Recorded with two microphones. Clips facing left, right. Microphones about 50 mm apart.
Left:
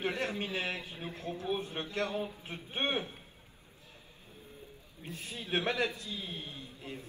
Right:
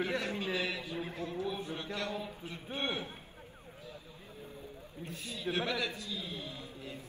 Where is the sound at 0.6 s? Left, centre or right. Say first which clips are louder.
Even; left.